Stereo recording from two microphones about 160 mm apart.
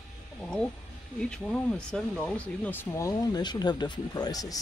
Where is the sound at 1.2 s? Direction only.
5° left (ahead or behind).